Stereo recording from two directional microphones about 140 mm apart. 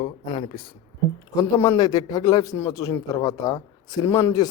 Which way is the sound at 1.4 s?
25° left (ahead or behind).